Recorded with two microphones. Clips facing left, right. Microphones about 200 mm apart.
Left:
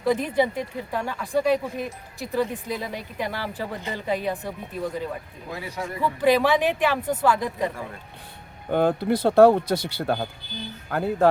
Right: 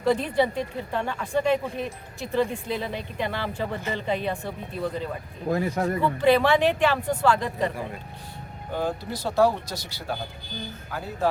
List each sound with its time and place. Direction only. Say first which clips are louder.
0.0 s speech: even; 10° left (ahead or behind)
5.5 s speech: right 9 dB; 50° right (ahead or behind)
6.0 s speech: left 1 dB; 10° left (ahead or behind)
8.7 s speech: left 8 dB; 60° left (ahead or behind)